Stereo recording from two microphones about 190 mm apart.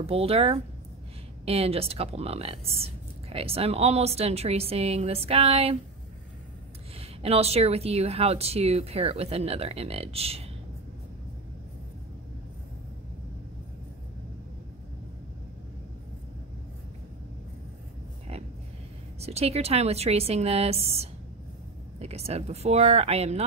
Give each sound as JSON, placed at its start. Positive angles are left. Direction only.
{"t": 0.0, "sound": "speech", "side_deg": -30}
{"t": 7.0, "sound": "speech", "side_deg": -30}
{"t": 19.1, "sound": "speech", "side_deg": -35}